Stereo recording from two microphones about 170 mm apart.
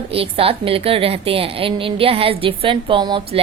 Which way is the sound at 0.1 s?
35° right (ahead or behind).